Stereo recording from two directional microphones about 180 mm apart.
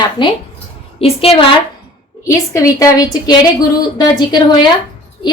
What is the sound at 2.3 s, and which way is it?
A woman's voice, 15° left (ahead or behind).